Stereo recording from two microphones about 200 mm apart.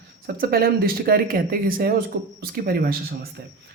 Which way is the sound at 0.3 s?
50° right (ahead or behind).